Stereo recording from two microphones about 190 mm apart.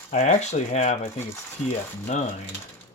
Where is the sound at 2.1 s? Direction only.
40° left (ahead or behind).